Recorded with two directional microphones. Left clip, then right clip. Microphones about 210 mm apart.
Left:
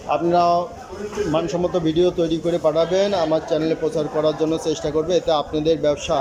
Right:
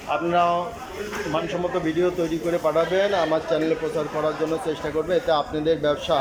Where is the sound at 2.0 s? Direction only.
15° left (ahead or behind).